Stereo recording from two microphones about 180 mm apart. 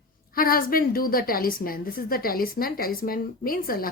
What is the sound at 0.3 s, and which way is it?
A woman's voice, 55° left (ahead or behind).